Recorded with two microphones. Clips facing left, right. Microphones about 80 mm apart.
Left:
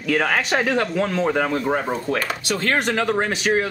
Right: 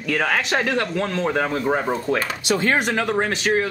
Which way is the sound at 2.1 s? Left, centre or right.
Centre.